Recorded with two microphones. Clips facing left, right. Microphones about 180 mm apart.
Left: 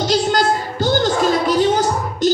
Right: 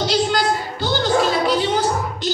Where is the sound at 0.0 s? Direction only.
45° left (ahead or behind).